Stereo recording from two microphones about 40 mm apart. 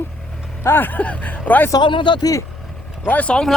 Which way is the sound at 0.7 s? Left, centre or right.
Left.